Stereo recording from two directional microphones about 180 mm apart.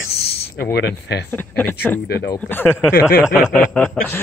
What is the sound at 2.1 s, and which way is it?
Speech, 60° left (ahead or behind).